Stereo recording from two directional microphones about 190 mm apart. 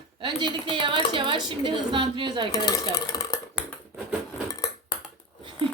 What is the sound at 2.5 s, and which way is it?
Dishes, 20° left (ahead or behind).